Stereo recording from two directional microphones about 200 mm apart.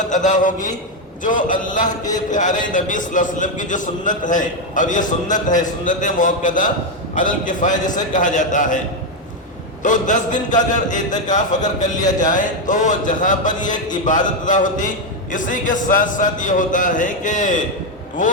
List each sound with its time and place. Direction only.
0.0 s a man's voice: 40° left (ahead or behind)
9.8 s a man's voice: 40° left (ahead or behind)